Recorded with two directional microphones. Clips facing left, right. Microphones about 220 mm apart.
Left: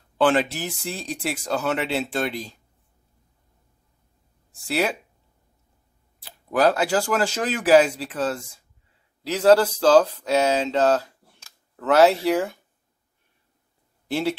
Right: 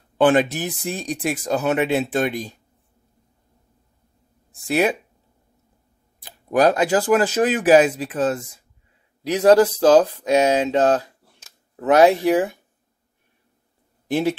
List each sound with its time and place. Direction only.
0.2 s speech: 15° right (ahead or behind)
4.6 s speech: 15° right (ahead or behind)
6.2 s speech: 15° right (ahead or behind)
11.8 s speech: 15° right (ahead or behind)